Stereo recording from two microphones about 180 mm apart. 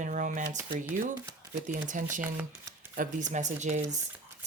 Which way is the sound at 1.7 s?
45° right (ahead or behind).